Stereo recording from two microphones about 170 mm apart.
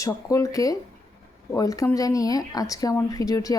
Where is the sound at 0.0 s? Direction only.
20° left (ahead or behind).